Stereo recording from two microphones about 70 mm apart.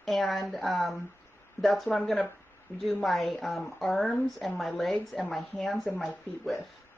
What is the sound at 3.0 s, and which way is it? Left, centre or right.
A woman's voice, centre.